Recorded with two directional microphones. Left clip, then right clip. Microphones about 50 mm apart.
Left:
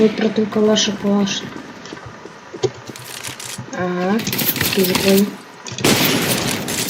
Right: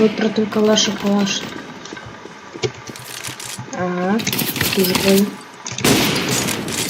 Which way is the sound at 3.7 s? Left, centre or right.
Centre.